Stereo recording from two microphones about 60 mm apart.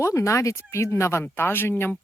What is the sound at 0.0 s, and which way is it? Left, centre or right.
Speech, left.